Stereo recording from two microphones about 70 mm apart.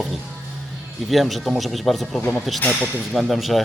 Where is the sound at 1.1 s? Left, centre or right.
Centre.